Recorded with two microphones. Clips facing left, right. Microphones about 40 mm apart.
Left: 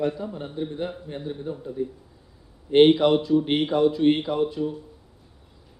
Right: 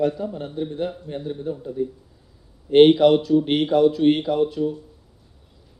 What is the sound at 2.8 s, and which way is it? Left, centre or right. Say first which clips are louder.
Speech: right 3 dB; centre.